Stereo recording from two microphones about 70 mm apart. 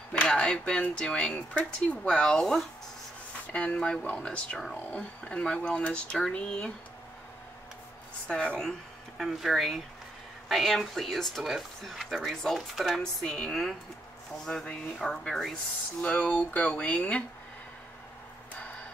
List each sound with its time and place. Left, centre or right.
0.2 s speech: centre
3.5 s speech: centre
8.3 s speech: centre
9.2 s speech: centre
16.0 s speech: centre